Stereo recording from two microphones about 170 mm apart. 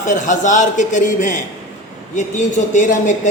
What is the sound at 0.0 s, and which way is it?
Speech, 45° left (ahead or behind).